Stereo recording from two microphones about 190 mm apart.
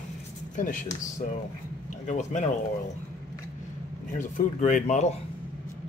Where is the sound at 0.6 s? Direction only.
45° left (ahead or behind).